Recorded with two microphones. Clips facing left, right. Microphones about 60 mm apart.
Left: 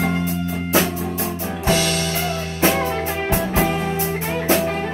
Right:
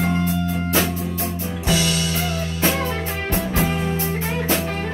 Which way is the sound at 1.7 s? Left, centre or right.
Left.